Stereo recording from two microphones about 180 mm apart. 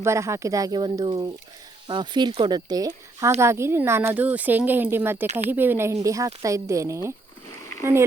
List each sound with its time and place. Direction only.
0.0 s speech: 15° right (ahead or behind)